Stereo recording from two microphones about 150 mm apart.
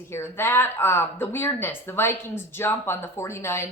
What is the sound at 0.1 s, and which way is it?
Speech, 15° left (ahead or behind).